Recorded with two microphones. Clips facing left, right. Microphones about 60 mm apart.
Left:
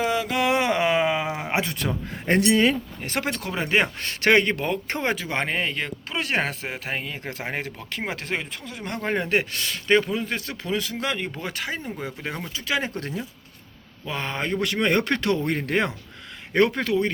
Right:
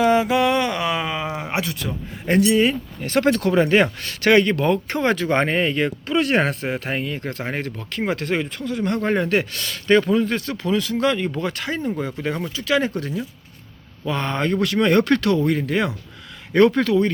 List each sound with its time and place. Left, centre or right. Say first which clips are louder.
0.4 s a sound: right 1 dB; centre
1.8 s a man's voice: left 1 dB; left
2.5 s speech: even; left
3.0 s speech: right 8 dB; left
3.2 s speech: right 13 dB; centre
4.0 s speech: right 3 dB; left
5.3 s speech: right 7 dB; centre
7.2 s speech: right 4 dB; centre
9.3 s speech: right 2 dB; left
13.0 s speech: right 4 dB; left
14.0 s speech: right 6 dB; centre; by 15.5 s left
15.5 s a man's voice: right 2 dB; left
16.5 s speech: right 5 dB; centre